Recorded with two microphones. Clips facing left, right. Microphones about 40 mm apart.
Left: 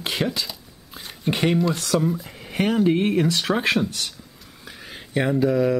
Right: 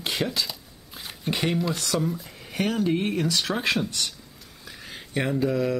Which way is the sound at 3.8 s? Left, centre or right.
Centre.